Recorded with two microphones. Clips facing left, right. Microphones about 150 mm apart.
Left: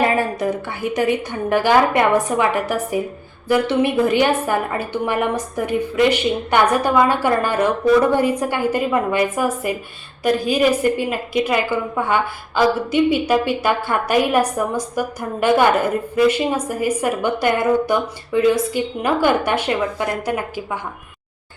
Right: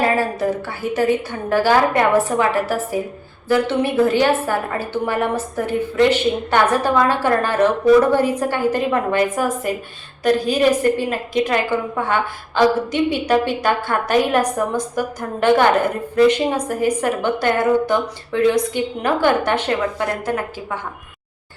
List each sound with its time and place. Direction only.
0.9 s a woman's voice: 15° left (ahead or behind)